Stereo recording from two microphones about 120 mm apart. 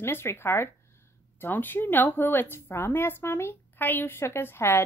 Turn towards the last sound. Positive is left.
turn(degrees=20)  # may be behind; listen again after turning